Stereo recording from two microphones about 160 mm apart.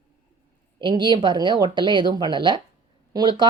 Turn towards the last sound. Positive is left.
turn(degrees=-30)  # may be behind; listen again after turning